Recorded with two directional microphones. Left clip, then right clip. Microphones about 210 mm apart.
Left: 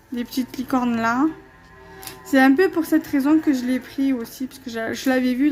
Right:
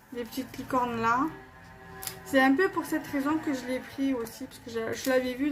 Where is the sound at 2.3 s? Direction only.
50° left (ahead or behind).